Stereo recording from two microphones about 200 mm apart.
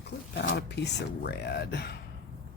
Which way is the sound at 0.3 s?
55° left (ahead or behind).